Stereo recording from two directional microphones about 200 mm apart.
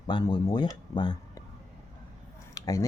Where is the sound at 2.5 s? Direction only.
15° left (ahead or behind).